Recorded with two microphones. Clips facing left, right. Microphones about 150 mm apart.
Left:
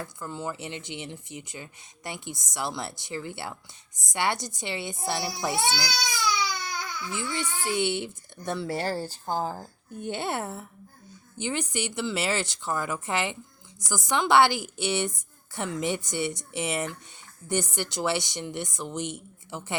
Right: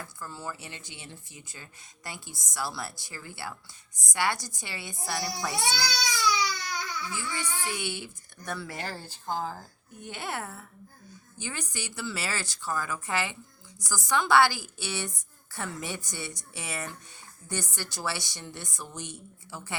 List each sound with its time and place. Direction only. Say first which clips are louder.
0.0 s speech: left 5 dB; 20° left (ahead or behind)
7.1 s speech: left 3 dB; 20° left (ahead or behind); by 9.6 s 40° left (ahead or behind)
10.0 s speech: left 6 dB; 25° left (ahead or behind)